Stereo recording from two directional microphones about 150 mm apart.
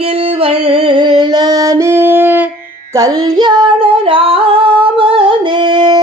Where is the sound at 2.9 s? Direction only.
25° right (ahead or behind).